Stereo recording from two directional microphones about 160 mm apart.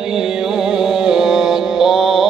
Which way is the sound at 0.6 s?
5° right (ahead or behind).